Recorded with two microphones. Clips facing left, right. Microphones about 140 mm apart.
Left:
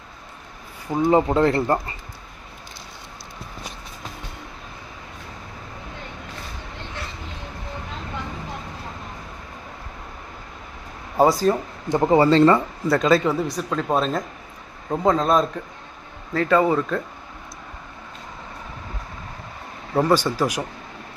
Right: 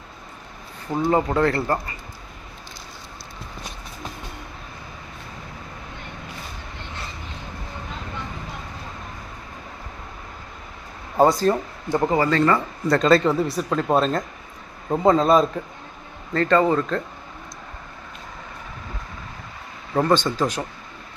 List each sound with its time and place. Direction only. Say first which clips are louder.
0.9 s speech: left 3 dB; 15° left (ahead or behind)
11.2 s a man's voice: even; 5° left (ahead or behind)
11.9 s speech: left 1 dB; 15° left (ahead or behind)
12.1 s speech: left 6 dB; 30° left (ahead or behind)
12.9 s a man's voice: right 1 dB; 5° left (ahead or behind)
19.9 s speech: left 1 dB; 10° left (ahead or behind)